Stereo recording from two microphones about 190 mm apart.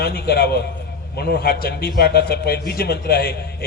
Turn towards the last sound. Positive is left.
turn(degrees=55)  # may be behind; listen again after turning